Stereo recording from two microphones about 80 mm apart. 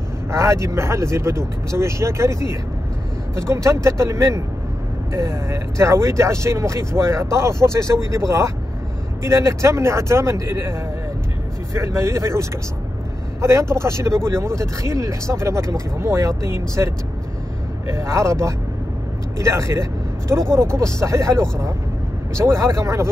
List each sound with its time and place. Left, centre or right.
0.3 s speech: right